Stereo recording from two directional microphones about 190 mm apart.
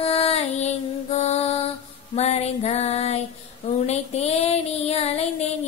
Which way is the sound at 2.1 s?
35° left (ahead or behind).